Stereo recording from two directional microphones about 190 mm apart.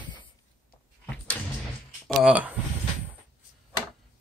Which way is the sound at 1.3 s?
10° left (ahead or behind).